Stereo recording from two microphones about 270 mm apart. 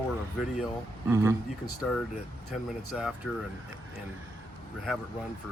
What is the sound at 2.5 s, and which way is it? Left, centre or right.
Speech, centre.